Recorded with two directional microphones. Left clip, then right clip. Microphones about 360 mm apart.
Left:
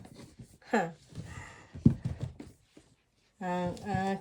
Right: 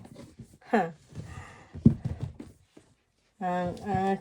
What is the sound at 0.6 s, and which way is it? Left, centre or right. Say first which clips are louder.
Speech: right 4 dB; centre.